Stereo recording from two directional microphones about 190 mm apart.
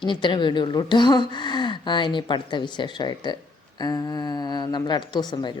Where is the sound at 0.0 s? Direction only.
25° left (ahead or behind).